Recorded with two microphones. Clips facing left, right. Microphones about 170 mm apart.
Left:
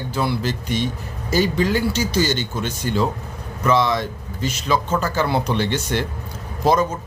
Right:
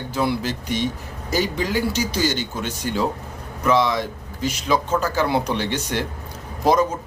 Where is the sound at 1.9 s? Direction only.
15° right (ahead or behind).